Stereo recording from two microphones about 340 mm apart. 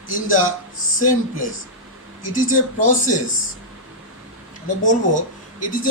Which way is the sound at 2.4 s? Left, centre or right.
Left.